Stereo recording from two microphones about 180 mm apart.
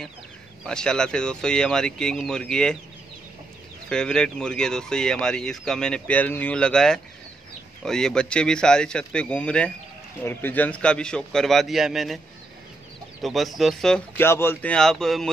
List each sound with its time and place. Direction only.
0.7 s speech: 5° left (ahead or behind)
3.9 s speech: 5° left (ahead or behind)
13.2 s speech: centre (ahead or behind)